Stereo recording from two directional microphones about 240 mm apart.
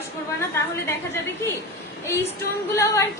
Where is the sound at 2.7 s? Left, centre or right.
Centre.